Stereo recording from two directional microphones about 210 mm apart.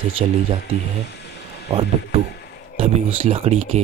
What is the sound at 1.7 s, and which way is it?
Speech, 25° right (ahead or behind).